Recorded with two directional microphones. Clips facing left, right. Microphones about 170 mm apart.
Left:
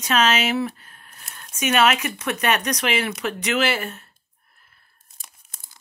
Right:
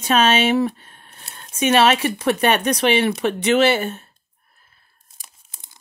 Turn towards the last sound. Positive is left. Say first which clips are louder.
# right 7 dB
turn(degrees=-30)  # may be behind; listen again after turning